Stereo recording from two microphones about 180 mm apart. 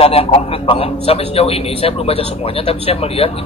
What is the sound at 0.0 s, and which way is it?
A man's voice, 35° left (ahead or behind).